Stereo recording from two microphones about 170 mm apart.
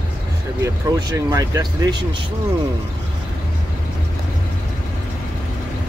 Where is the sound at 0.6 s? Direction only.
20° right (ahead or behind).